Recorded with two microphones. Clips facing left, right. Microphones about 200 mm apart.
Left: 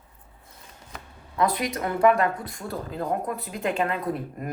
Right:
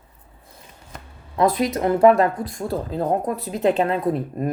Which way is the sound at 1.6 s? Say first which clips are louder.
Right 8 dB; 30° right (ahead or behind).